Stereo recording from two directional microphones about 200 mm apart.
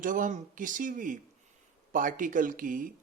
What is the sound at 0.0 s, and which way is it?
Speech, 40° right (ahead or behind).